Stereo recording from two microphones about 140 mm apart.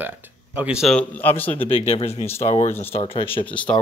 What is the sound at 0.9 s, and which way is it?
Speech, 15° left (ahead or behind).